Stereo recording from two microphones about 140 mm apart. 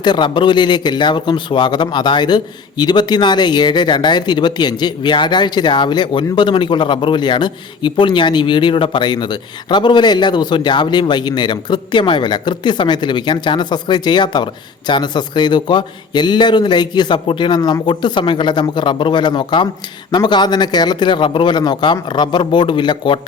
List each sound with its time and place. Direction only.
0.0 s speech: 35° left (ahead or behind)